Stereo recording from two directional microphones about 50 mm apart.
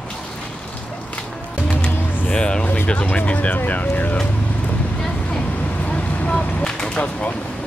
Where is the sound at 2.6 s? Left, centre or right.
Left.